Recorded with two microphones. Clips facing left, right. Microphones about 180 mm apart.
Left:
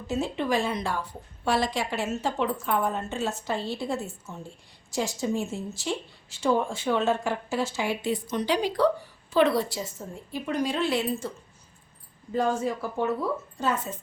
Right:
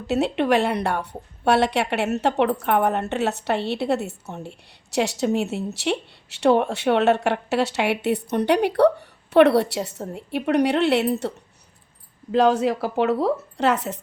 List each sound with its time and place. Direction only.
0.1 s a woman's voice: 70° right (ahead or behind)
12.3 s a woman's voice: 75° right (ahead or behind)